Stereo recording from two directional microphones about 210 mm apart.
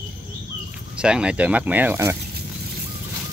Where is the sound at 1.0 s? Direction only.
5° right (ahead or behind).